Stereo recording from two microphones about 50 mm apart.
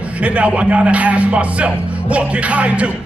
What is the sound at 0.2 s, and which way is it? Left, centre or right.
Music, right.